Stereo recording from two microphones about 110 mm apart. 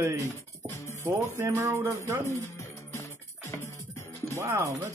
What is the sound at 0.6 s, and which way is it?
Music, 30° left (ahead or behind).